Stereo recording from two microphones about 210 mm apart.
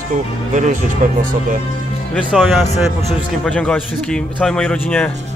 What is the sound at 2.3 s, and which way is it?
A man's voice, centre (ahead or behind).